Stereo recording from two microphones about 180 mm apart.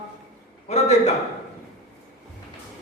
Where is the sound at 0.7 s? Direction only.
40° left (ahead or behind).